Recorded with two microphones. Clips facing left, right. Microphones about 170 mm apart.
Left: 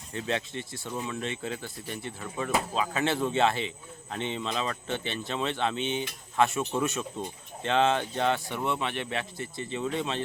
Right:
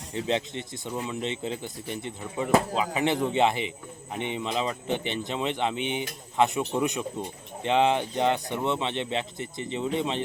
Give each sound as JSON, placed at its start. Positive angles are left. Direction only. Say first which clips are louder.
{"t": 0.1, "sound": "speech", "louder": "right 3 dB", "side_deg": -20}